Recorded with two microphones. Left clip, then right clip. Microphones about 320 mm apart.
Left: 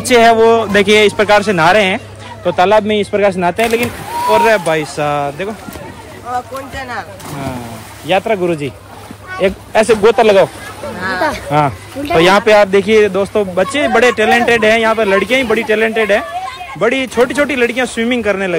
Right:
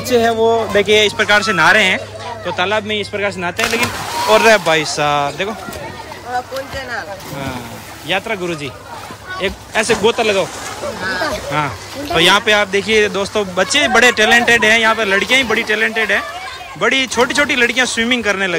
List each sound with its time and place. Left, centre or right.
0.4 s a man's voice: left
4.3 s speech: centre
8.1 s a man's voice: centre
11.5 s speech: centre